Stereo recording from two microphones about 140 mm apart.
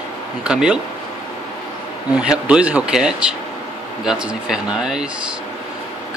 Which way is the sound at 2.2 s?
5° right (ahead or behind).